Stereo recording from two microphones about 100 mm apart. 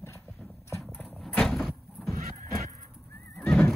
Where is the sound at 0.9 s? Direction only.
15° left (ahead or behind).